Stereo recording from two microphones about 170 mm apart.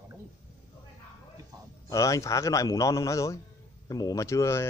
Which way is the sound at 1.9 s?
20° left (ahead or behind).